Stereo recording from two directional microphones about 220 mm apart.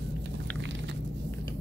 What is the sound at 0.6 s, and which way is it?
Biting, 55° right (ahead or behind).